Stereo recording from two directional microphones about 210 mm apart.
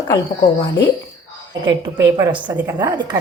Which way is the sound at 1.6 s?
15° right (ahead or behind).